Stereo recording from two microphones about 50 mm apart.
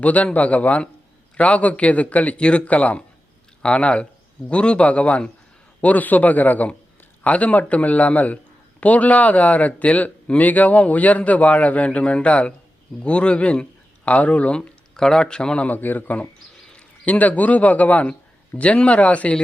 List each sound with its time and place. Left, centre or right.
0.0 s speech: left
14.9 s a man's voice: centre; by 19.4 s left